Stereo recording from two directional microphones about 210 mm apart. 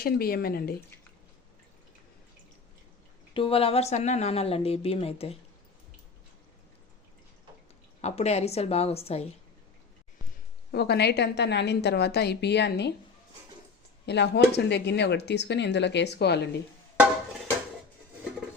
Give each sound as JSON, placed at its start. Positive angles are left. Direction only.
{"t": 0.0, "sound": "speech", "side_deg": 45}
{"t": 3.3, "sound": "a woman's voice", "side_deg": 25}
{"t": 8.0, "sound": "a woman's voice", "side_deg": 30}
{"t": 10.7, "sound": "speech", "side_deg": 50}
{"t": 14.1, "sound": "speech", "side_deg": 55}